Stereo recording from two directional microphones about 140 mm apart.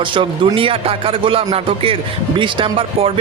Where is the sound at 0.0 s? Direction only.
35° right (ahead or behind).